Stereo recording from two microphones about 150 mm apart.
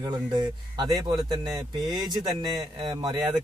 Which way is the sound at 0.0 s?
30° right (ahead or behind).